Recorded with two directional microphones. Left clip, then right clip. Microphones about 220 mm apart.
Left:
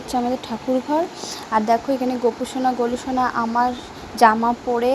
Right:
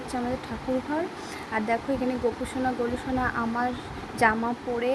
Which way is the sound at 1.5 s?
10° left (ahead or behind).